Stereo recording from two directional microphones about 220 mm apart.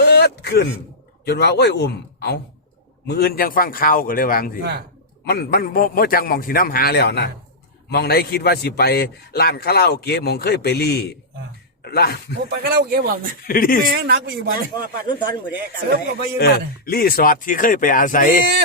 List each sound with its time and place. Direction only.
0.0 s a sound: 50° left (ahead or behind)
1.2 s a man's voice: 50° left (ahead or behind)
12.5 s speech: 45° right (ahead or behind)
13.5 s a man's voice: 40° left (ahead or behind)
13.9 s a man's voice: 45° right (ahead or behind)
16.4 s a man's voice: 45° left (ahead or behind)